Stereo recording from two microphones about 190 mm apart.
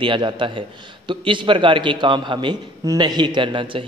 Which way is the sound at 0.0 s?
25° right (ahead or behind).